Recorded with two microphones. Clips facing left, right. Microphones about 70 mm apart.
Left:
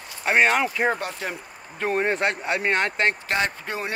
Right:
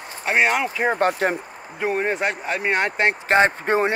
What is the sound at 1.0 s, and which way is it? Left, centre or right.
Speech, right.